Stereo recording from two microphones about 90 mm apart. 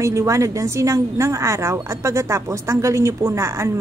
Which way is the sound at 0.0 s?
35° right (ahead or behind).